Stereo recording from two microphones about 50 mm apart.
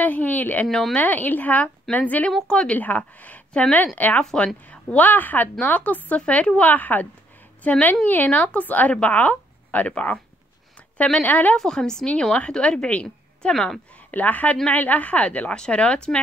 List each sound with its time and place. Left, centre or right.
0.0 s speech: left
0.7 s speech: centre
0.9 s speech: left
2.4 s speech: centre
2.7 s speech: left
3.2 s a sound: left
3.7 s speech: left
11.2 s speech: left
11.5 s speech: centre
14.1 s speech: left